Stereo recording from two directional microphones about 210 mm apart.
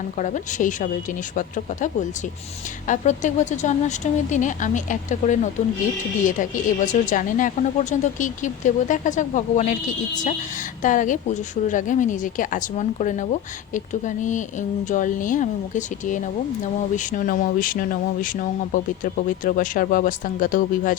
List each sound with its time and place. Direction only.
0.2 s speech: 35° left (ahead or behind)